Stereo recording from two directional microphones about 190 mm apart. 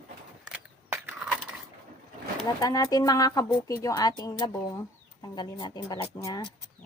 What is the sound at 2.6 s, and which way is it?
Speech, 20° left (ahead or behind).